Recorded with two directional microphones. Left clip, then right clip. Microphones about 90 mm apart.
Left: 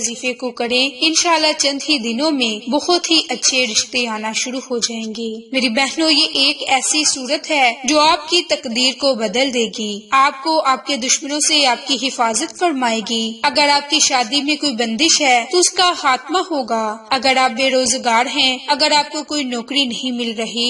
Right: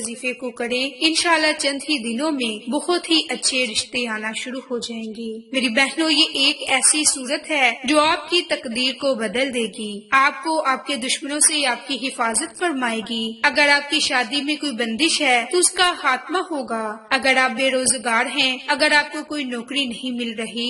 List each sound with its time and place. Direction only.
0.4 s a woman's voice: 40° left (ahead or behind)
1.0 s a woman's voice: 25° left (ahead or behind)
5.5 s a woman's voice: 35° left (ahead or behind)